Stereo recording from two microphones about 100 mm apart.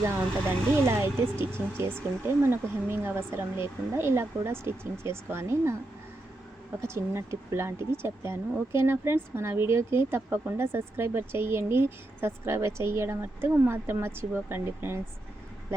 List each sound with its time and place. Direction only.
0.9 s speech: 25° right (ahead or behind)
6.8 s speech: 25° right (ahead or behind)